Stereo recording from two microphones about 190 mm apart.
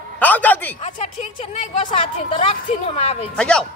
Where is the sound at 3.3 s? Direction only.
5° left (ahead or behind).